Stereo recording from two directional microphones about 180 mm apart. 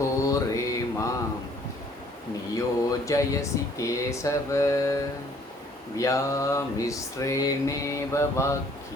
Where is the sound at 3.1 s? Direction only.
15° left (ahead or behind).